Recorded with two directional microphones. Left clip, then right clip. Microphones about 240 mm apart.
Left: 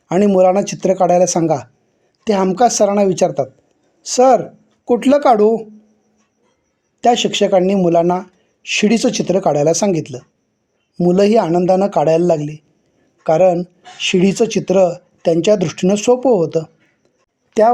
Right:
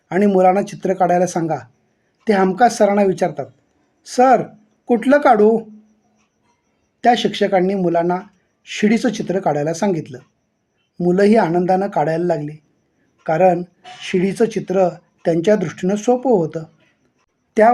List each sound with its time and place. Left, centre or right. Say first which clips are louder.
0.1 s speech: left 2 dB; left
7.0 s speech: left 2 dB; left